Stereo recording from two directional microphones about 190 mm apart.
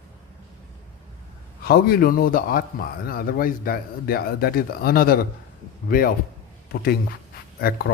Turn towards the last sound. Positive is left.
turn(degrees=50)  # may be behind; listen again after turning